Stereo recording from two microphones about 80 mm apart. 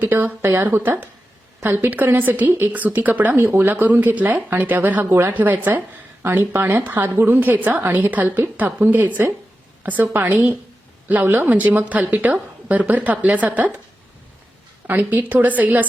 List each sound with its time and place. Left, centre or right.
0.0 s a woman's voice: right
14.8 s a woman's voice: right